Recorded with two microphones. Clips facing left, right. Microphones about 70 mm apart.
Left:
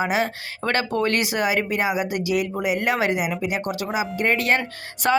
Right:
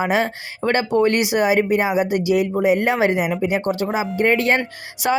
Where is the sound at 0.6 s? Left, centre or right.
Centre.